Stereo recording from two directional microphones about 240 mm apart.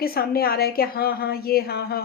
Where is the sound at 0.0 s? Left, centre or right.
Left.